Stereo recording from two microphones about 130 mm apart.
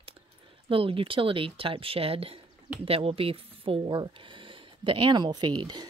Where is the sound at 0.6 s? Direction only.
45° right (ahead or behind).